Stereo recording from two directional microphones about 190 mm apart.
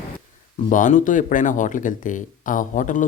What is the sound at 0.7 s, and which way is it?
Speech, 45° left (ahead or behind).